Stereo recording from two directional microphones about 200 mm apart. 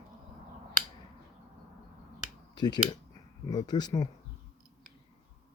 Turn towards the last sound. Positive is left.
turn(degrees=20)  # may be behind; listen again after turning